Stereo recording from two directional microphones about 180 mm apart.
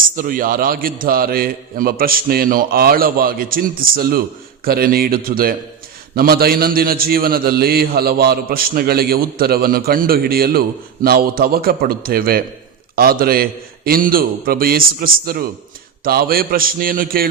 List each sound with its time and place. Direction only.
0.2 s a man's voice: 50° right (ahead or behind)